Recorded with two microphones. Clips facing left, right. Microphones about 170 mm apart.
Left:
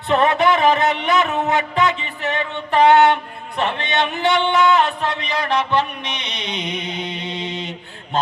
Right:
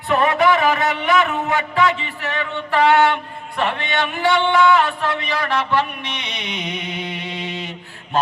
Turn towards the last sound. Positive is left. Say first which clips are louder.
# left 1 dB
turn(degrees=20)  # may be behind; listen again after turning